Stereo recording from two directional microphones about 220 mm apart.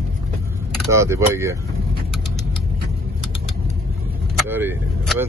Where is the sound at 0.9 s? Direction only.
15° right (ahead or behind).